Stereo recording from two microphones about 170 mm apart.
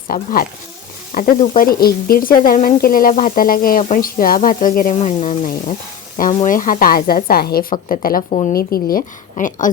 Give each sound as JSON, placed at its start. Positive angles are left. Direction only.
{"t": 0.1, "sound": "a woman's voice", "side_deg": 55}
{"t": 4.9, "sound": "a woman's voice", "side_deg": 40}
{"t": 9.4, "sound": "speech", "side_deg": 50}